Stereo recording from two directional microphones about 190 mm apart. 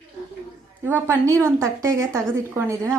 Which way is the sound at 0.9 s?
15° right (ahead or behind).